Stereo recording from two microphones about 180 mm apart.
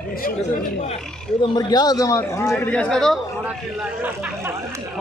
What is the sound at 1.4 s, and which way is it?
A man's voice, 20° left (ahead or behind).